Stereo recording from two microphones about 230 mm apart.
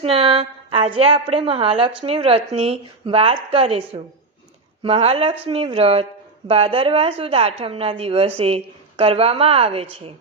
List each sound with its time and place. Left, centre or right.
0.0 s speech: right